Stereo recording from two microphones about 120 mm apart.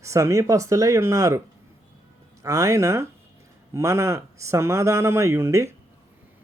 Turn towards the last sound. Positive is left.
turn(degrees=-25)  # may be behind; listen again after turning